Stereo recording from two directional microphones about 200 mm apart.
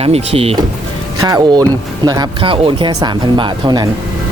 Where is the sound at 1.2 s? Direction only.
20° right (ahead or behind).